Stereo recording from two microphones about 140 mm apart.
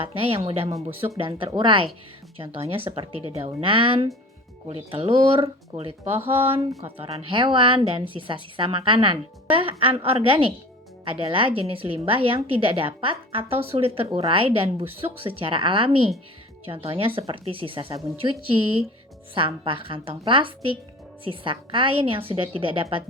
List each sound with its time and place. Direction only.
0.0 s a woman's voice: 40° right (ahead or behind)
19.3 s a woman's voice: 40° right (ahead or behind)